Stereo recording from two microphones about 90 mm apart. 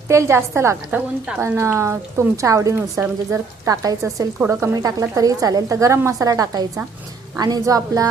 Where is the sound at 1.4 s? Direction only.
30° right (ahead or behind).